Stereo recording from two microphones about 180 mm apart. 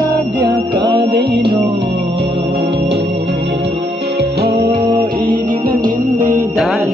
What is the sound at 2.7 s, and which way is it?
Music, 75° right (ahead or behind).